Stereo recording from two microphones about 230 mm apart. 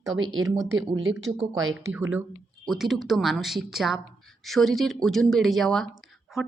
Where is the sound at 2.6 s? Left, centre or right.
Centre.